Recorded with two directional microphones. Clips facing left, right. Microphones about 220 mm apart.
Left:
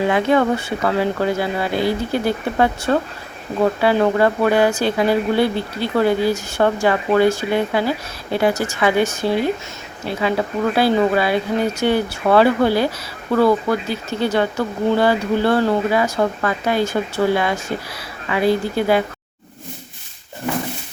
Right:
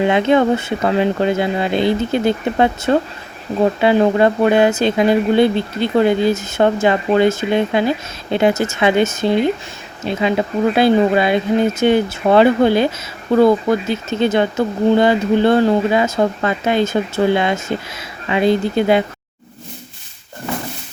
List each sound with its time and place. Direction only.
0.1 s speech: 20° right (ahead or behind)